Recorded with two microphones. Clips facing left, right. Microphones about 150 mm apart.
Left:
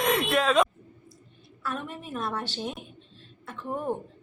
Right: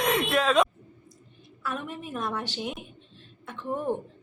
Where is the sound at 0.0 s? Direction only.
Centre (ahead or behind).